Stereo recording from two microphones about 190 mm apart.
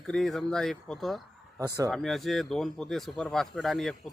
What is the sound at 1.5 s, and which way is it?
Speech, 15° right (ahead or behind).